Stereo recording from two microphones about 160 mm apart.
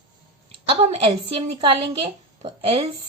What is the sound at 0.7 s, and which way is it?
A woman's voice, 35° right (ahead or behind).